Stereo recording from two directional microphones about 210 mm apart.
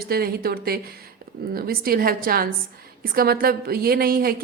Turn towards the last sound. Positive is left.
turn(degrees=-45)  # may be behind; listen again after turning